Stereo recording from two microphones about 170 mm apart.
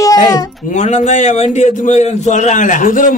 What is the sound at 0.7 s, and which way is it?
A woman's voice, 45° left (ahead or behind).